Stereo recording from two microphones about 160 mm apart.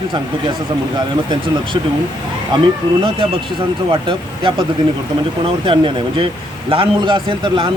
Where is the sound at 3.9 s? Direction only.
30° right (ahead or behind).